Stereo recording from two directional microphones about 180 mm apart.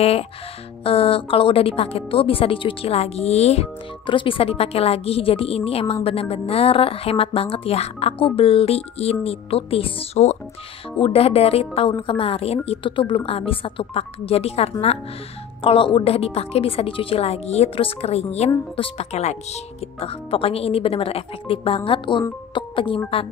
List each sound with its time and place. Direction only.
0.0 s a woman's voice: 35° left (ahead or behind)